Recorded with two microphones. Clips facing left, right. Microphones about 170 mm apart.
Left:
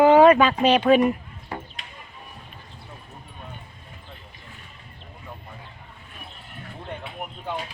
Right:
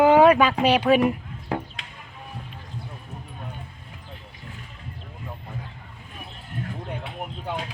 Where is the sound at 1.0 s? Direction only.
65° right (ahead or behind).